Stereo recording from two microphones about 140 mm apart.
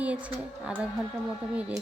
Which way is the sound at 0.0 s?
10° right (ahead or behind).